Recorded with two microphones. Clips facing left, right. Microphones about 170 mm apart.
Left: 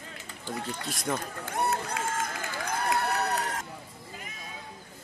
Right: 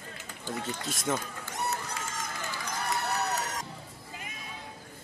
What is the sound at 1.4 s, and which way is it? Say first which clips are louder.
Run: left 5 dB; 55° left (ahead or behind).